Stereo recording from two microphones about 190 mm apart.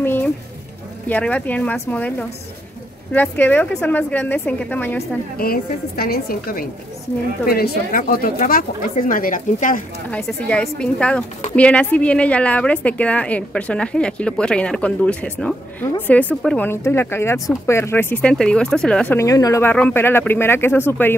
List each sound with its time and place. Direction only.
0.0 s music: 10° left (ahead or behind)
1.0 s a woman's voice: 10° left (ahead or behind)
5.4 s speech: 55° left (ahead or behind)
10.1 s a woman's voice: 5° left (ahead or behind)